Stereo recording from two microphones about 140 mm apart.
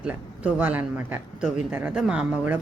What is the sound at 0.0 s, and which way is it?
Speech, 10° right (ahead or behind).